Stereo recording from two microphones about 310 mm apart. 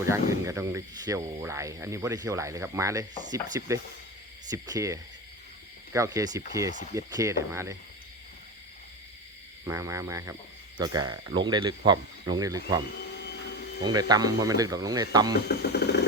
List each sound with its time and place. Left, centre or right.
0.1 s speech: centre
9.6 s speech: centre
13.8 s speech: centre
15.4 s speech: left